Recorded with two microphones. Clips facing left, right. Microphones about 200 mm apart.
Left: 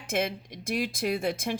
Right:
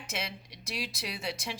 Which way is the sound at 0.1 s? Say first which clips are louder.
Left 11 dB; 50° left (ahead or behind).